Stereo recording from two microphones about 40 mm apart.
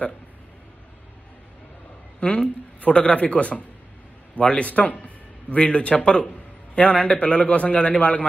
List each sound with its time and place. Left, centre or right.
2.1 s a man's voice: left